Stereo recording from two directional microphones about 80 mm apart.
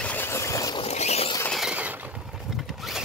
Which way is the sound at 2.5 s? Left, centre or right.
Centre.